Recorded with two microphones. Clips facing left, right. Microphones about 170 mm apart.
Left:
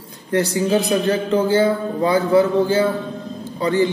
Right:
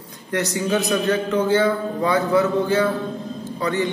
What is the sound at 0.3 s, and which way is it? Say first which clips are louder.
A man's voice: left 4 dB; 30° left (ahead or behind).